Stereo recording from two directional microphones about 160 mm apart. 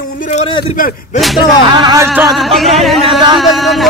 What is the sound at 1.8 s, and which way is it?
Speech, 20° right (ahead or behind).